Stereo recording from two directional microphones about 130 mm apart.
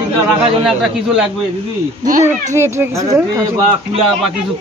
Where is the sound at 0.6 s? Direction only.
Centre (ahead or behind).